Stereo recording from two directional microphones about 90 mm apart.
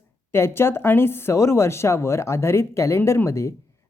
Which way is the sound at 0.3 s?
30° left (ahead or behind).